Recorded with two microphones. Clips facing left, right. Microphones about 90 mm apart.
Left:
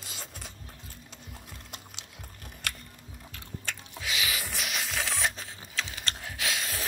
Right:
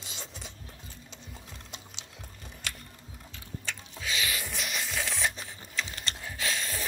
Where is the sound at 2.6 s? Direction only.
55° left (ahead or behind).